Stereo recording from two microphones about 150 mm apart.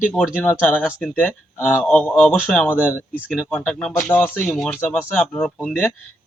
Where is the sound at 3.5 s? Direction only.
5° left (ahead or behind).